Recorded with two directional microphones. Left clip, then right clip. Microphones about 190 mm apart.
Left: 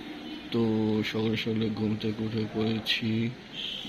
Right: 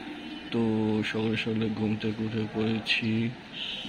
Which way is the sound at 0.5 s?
Centre (ahead or behind).